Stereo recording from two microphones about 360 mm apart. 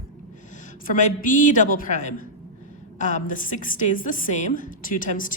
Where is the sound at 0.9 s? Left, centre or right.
Left.